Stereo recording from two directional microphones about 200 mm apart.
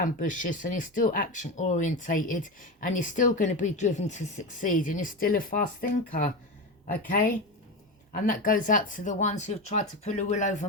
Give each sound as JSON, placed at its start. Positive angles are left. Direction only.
{"t": 0.0, "sound": "speech", "side_deg": 40}